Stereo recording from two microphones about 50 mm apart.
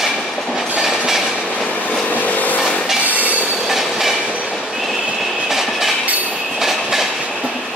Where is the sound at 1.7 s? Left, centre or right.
Left.